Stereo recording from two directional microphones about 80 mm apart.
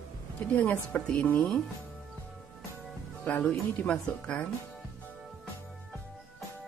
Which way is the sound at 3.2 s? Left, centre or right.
Centre.